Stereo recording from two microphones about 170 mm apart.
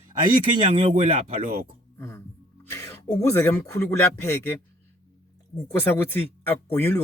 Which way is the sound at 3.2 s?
15° left (ahead or behind).